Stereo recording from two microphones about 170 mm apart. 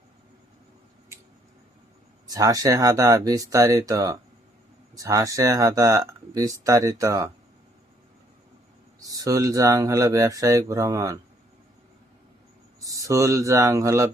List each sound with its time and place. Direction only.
2.2 s speech: 20° right (ahead or behind)
9.0 s speech: 20° right (ahead or behind)
12.8 s speech: 20° right (ahead or behind)